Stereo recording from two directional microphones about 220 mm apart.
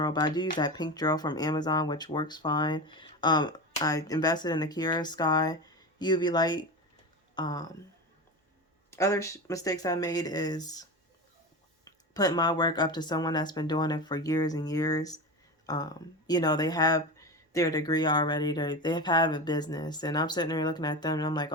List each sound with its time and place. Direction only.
0.0 s speech: 20° left (ahead or behind)
8.9 s speech: 15° left (ahead or behind)
11.9 s speech: 15° left (ahead or behind)